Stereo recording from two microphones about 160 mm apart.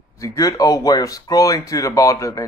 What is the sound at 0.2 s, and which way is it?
Speech, 20° left (ahead or behind).